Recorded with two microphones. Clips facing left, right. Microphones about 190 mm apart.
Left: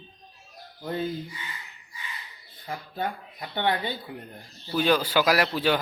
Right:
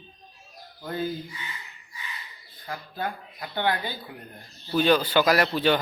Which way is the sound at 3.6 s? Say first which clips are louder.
Even; 25° left (ahead or behind).